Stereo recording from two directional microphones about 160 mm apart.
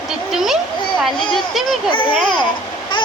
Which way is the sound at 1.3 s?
Centre (ahead or behind).